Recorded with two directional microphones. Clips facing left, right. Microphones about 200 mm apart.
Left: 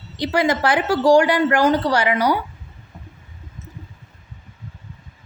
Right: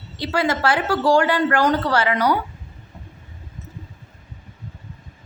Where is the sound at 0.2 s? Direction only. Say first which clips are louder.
Left 2 dB; 15° left (ahead or behind).